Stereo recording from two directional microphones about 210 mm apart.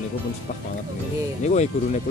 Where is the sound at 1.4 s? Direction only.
35° left (ahead or behind).